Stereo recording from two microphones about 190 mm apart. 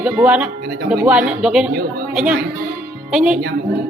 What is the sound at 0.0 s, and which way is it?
Speech, 5° right (ahead or behind).